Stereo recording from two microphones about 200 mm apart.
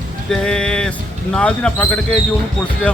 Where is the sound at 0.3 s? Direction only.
5° left (ahead or behind).